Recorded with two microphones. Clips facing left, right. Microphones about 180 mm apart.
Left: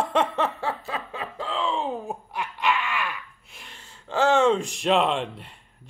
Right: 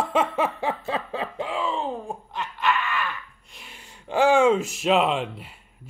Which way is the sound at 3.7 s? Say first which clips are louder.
Right 3 dB; 15° right (ahead or behind).